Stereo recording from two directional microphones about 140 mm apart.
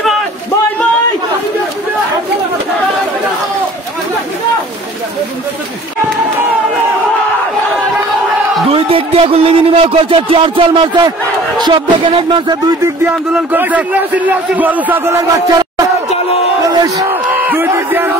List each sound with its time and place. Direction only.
8.6 s speech: 40° right (ahead or behind)
12.8 s a man's voice: 15° right (ahead or behind)
16.6 s crowd: 25° right (ahead or behind)
17.1 s crowd: 15° right (ahead or behind)